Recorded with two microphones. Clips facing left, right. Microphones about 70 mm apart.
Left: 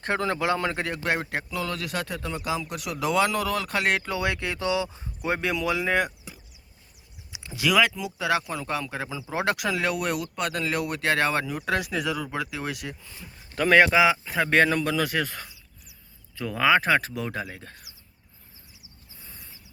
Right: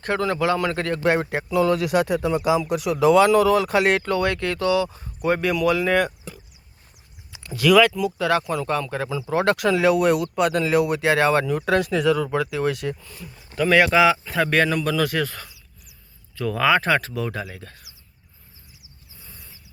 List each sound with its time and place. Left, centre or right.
0.0 s speech: left
0.8 s speech: centre
1.0 s speech: centre
4.0 s speech: centre
6.3 s a sound: centre
7.3 s speech: centre
13.1 s speech: left
13.6 s speech: left
13.9 s speech: centre
14.5 s speech: left